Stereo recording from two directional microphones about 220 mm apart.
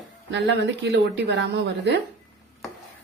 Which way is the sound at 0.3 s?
55° right (ahead or behind).